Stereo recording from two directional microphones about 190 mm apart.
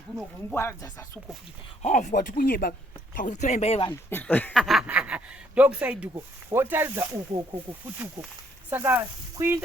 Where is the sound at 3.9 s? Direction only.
10° left (ahead or behind).